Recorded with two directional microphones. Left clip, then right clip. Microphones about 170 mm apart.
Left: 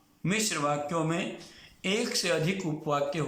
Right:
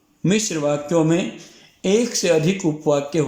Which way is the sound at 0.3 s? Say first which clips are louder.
Right 8 dB; 65° right (ahead or behind).